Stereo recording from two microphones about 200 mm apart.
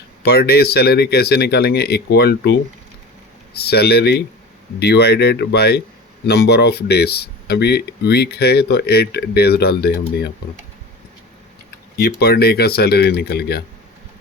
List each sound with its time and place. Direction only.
0.2 s speech: 50° left (ahead or behind)
11.9 s speech: 50° left (ahead or behind)